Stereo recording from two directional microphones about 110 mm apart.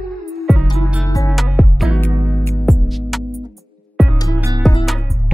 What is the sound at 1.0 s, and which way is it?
Music, 30° left (ahead or behind).